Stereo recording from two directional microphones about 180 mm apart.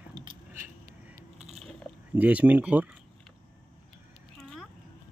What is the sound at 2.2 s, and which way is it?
Speech, 10° right (ahead or behind).